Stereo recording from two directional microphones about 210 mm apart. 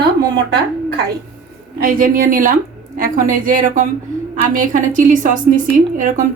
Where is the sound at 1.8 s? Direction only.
40° right (ahead or behind).